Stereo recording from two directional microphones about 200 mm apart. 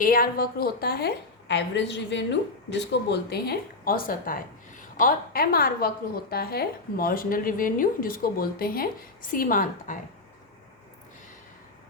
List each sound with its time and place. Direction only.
0.0 s speech: 45° left (ahead or behind)